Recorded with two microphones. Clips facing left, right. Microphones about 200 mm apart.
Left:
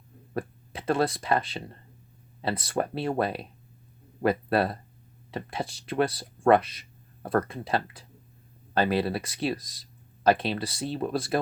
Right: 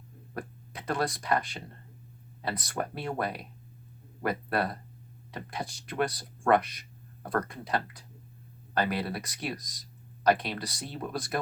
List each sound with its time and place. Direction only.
0.3 s speech: 25° left (ahead or behind)